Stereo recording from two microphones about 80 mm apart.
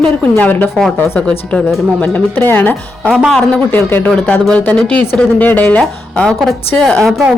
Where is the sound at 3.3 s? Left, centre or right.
Centre.